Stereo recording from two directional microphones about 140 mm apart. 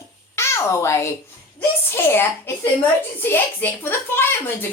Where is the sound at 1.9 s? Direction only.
15° left (ahead or behind).